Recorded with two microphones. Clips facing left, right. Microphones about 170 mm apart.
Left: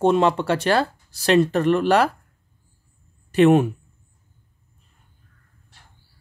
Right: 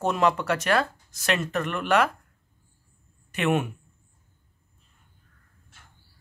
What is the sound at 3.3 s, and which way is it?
Speech, 35° left (ahead or behind).